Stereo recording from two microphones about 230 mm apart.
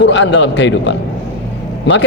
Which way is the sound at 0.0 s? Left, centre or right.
Left.